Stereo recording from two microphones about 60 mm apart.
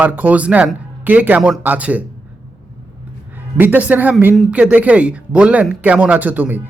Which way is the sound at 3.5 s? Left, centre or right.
Right.